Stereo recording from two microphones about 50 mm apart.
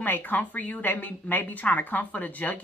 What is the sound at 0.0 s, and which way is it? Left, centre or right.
A woman's voice, left.